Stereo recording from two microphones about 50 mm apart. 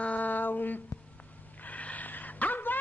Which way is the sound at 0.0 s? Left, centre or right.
Left.